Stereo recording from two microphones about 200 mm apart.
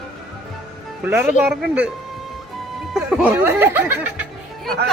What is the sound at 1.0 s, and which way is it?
Speech, 5° right (ahead or behind).